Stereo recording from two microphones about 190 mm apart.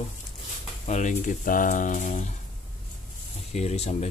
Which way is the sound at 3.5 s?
35° left (ahead or behind).